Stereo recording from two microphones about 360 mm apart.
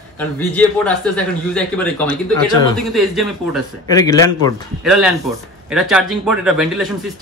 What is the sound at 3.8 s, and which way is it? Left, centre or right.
Speech, centre.